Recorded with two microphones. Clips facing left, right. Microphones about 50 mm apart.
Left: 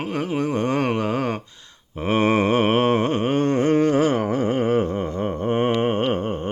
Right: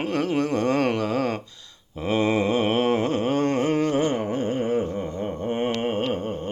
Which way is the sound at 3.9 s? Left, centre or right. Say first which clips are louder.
Left 4 dB; left.